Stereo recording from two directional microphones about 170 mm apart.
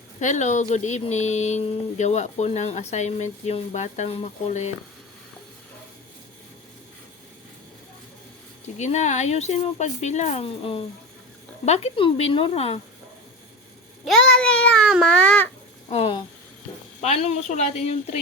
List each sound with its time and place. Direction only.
0.2 s speech: 45° left (ahead or behind)
8.8 s speech: 45° left (ahead or behind)
14.0 s a child's voice: 5° left (ahead or behind)
15.9 s speech: 35° left (ahead or behind)